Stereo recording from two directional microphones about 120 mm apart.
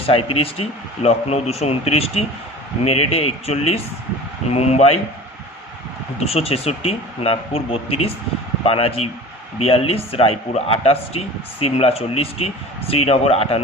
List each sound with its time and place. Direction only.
0.0 s speech: 55° left (ahead or behind)
6.1 s speech: 55° left (ahead or behind)